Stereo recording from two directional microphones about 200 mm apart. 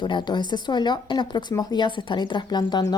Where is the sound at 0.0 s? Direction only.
25° left (ahead or behind).